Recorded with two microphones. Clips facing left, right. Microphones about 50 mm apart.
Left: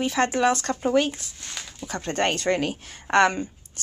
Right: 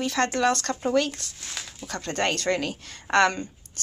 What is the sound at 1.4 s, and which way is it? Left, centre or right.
Speech, centre.